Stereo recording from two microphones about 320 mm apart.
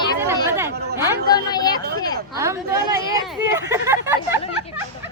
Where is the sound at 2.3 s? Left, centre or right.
Centre.